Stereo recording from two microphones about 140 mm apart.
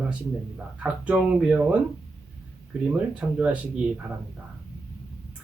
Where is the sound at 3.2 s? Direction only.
10° right (ahead or behind).